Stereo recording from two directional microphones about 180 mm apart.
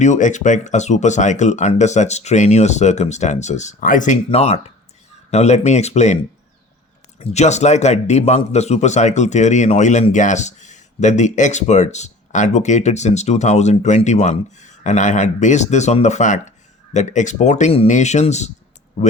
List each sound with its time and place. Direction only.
0.0 s speech: 45° left (ahead or behind)
7.2 s speech: 40° left (ahead or behind)